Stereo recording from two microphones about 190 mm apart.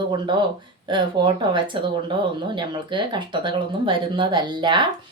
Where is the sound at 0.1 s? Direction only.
25° right (ahead or behind).